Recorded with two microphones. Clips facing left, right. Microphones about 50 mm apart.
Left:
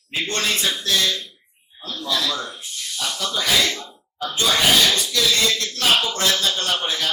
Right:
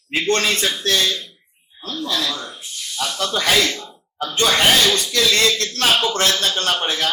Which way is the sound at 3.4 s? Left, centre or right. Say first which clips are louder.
Right 2 dB; right.